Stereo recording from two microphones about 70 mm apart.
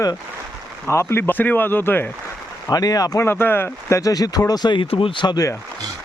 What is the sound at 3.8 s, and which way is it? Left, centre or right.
Speech, left.